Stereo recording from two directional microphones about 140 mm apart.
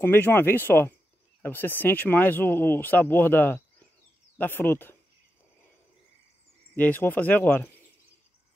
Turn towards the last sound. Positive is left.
turn(degrees=10)  # may be behind; listen again after turning